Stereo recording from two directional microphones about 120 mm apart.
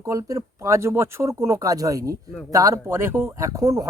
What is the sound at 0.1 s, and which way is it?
Speech, 30° right (ahead or behind).